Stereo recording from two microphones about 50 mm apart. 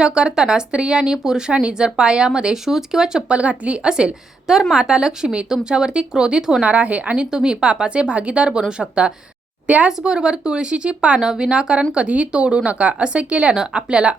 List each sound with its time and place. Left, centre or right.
0.0 s speech: centre
3.3 s speech: right
6.6 s speech: right
7.3 s speech: centre
9.6 s a woman's voice: right
10.0 s speech: centre